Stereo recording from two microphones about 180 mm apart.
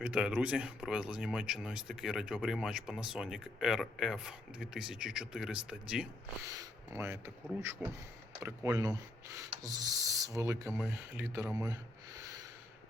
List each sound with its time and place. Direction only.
0.0 s speech: 5° right (ahead or behind)
6.4 s speech: 20° right (ahead or behind)
7.6 s rub: 15° right (ahead or behind)